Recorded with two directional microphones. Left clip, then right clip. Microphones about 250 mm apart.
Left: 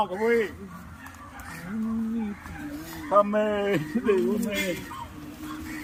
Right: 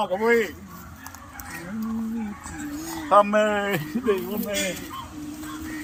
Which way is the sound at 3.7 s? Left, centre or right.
Right.